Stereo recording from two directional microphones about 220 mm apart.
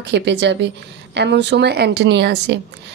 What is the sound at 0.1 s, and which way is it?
A woman's voice, 50° right (ahead or behind).